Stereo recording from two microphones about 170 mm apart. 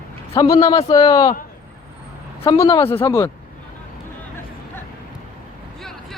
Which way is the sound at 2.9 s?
15° left (ahead or behind).